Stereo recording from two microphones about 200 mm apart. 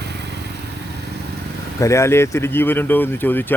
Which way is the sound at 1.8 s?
15° left (ahead or behind).